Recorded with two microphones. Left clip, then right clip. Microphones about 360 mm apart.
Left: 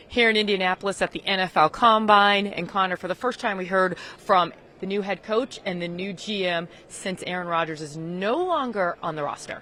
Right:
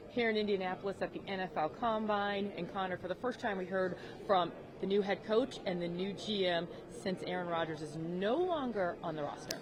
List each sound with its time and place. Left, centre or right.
0.2 s a woman's voice: left
4.9 s a woman's voice: left